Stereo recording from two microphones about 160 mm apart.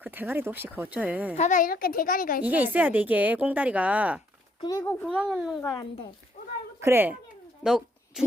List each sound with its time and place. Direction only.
0.0 s a woman's voice: 10° right (ahead or behind)
1.4 s a child's voice: 55° left (ahead or behind)
2.4 s a woman's voice: 10° right (ahead or behind)
6.7 s a child's voice: 15° right (ahead or behind)
7.6 s a sound: 5° right (ahead or behind)